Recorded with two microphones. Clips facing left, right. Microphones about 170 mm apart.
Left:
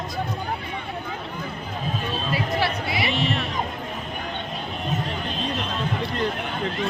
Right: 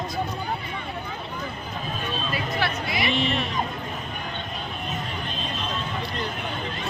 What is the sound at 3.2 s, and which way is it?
Speech, centre (ahead or behind).